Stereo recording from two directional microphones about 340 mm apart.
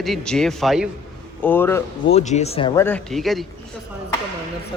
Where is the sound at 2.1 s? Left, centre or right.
Centre.